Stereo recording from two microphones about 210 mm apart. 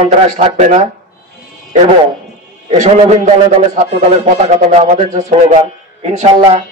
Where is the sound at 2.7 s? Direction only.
30° right (ahead or behind).